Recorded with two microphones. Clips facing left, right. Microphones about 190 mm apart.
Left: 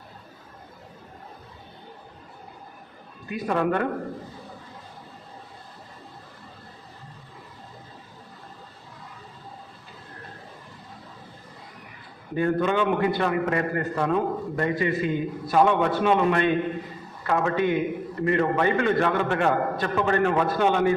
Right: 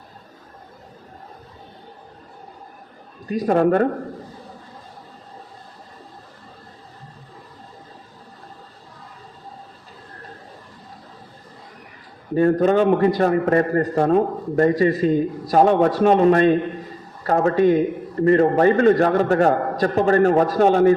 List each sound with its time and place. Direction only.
3.2 s a man's voice: 40° right (ahead or behind)
12.3 s a man's voice: 40° right (ahead or behind)